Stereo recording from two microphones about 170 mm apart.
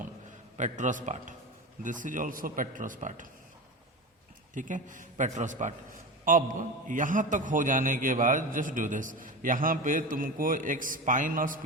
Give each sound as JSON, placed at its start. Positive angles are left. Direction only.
{"t": 0.5, "sound": "a man's voice", "side_deg": -45}
{"t": 4.5, "sound": "a man's voice", "side_deg": -50}